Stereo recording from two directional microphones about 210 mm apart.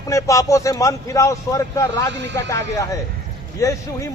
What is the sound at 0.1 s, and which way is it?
A man's voice, 15° left (ahead or behind).